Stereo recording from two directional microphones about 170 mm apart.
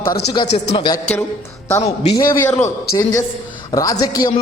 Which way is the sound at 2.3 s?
15° left (ahead or behind).